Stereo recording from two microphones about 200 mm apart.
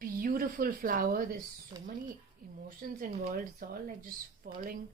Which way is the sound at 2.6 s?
45° right (ahead or behind).